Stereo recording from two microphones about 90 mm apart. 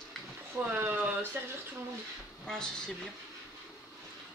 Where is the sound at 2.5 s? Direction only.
10° left (ahead or behind).